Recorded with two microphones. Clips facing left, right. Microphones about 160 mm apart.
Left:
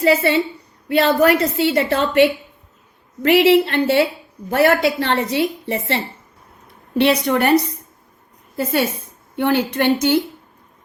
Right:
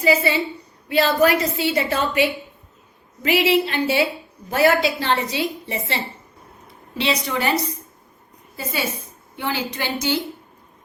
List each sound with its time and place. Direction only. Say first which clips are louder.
0.0 s a woman's voice: left 3 dB; 65° left (ahead or behind)
9.3 s a woman's voice: left 8 dB; 60° left (ahead or behind)